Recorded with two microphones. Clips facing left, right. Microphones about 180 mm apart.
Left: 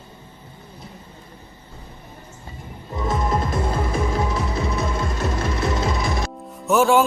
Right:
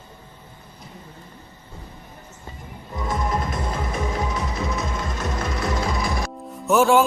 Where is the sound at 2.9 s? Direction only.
25° left (ahead or behind).